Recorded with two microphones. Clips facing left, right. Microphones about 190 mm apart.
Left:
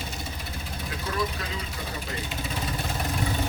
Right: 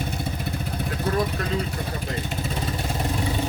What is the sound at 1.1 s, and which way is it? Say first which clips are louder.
Vehicle: right 7 dB; 60° right (ahead or behind).